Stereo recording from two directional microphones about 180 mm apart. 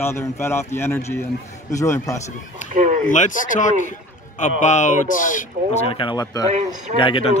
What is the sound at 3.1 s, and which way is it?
Speech, 45° left (ahead or behind).